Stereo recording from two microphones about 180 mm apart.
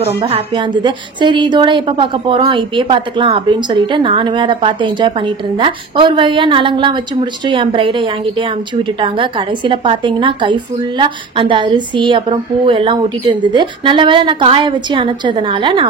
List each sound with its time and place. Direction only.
0.0 s a woman's voice: 35° right (ahead or behind)